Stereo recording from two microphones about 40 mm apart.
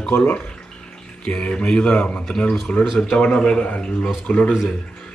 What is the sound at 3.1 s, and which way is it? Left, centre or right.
Speech, left.